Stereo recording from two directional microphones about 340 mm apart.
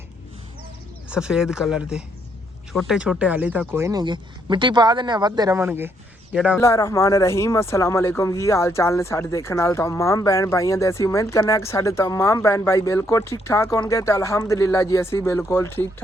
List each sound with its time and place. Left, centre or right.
1.1 s speech: centre